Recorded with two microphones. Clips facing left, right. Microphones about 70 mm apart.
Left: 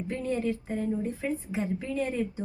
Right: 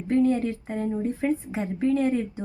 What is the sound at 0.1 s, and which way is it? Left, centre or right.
A woman's voice, right.